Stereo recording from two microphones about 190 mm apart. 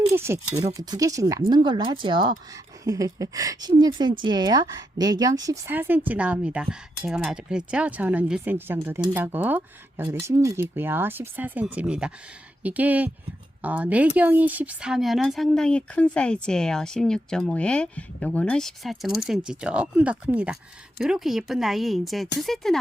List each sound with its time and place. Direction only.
0.1 s a woman's voice: 15° right (ahead or behind)